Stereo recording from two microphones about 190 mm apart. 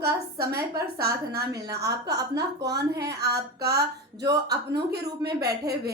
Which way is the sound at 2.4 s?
20° right (ahead or behind).